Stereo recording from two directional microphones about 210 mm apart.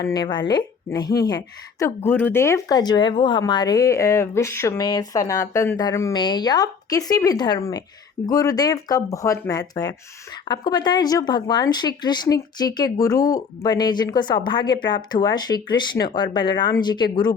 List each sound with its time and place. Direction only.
0.0 s a woman's voice: 20° left (ahead or behind)